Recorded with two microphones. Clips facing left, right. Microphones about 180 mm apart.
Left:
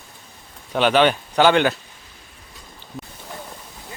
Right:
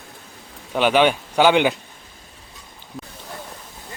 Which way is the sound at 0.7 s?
10° right (ahead or behind).